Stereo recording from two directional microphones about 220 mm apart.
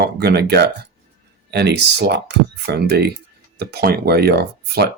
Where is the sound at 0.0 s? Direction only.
45° right (ahead or behind).